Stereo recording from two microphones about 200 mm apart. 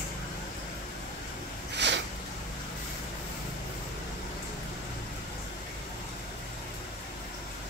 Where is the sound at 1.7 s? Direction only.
60° right (ahead or behind).